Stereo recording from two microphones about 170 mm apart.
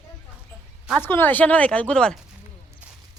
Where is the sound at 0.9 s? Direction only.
10° left (ahead or behind).